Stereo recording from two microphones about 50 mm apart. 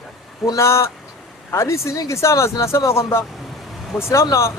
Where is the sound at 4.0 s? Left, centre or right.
Left.